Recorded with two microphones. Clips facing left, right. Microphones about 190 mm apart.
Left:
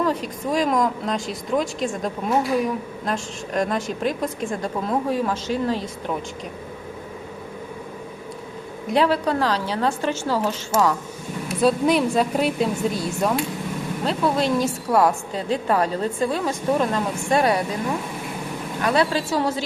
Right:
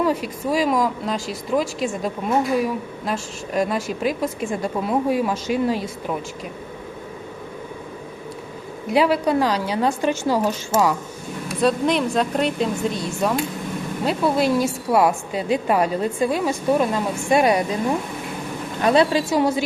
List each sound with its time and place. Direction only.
0.0 s speech: 10° right (ahead or behind)
8.9 s a woman's voice: 10° right (ahead or behind)
11.6 s speech: 5° left (ahead or behind)
14.0 s a woman's voice: 10° right (ahead or behind)
18.8 s a woman's voice: 20° right (ahead or behind)